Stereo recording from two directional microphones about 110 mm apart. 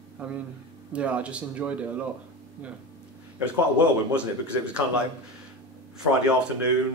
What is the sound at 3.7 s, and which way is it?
Speech, 10° right (ahead or behind).